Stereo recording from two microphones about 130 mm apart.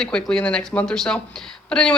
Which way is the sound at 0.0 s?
5° left (ahead or behind).